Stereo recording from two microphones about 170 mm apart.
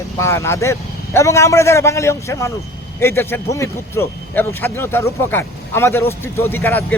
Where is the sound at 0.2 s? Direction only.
15° left (ahead or behind).